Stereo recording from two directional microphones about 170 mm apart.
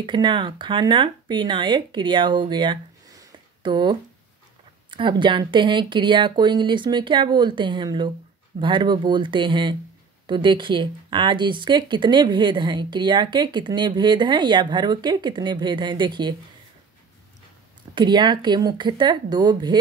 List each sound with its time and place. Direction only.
0.0 s speech: 25° right (ahead or behind)
4.9 s speech: 30° right (ahead or behind)
17.9 s speech: 25° right (ahead or behind)